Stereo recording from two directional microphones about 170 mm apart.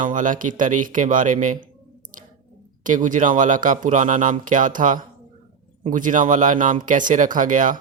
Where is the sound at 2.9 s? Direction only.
50° right (ahead or behind).